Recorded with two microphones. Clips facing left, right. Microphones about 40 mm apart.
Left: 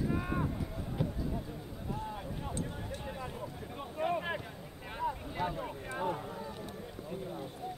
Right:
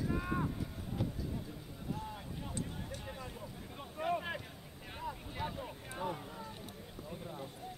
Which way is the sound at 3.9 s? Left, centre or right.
Centre.